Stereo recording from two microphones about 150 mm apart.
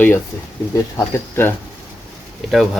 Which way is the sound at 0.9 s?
15° left (ahead or behind).